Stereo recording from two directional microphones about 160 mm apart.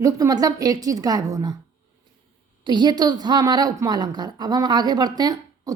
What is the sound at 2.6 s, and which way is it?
A woman's voice, 25° right (ahead or behind).